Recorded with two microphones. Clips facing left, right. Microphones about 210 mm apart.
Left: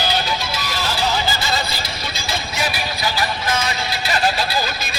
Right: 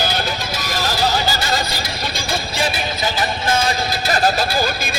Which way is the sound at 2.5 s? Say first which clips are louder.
Right 3 dB; 25° right (ahead or behind).